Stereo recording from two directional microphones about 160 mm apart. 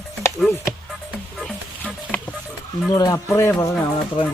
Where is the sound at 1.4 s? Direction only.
10° left (ahead or behind).